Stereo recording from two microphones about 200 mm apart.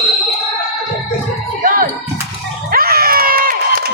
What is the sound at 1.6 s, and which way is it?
Music, 45° right (ahead or behind).